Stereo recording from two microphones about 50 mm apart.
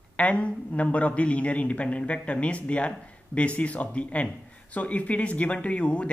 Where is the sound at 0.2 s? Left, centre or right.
Left.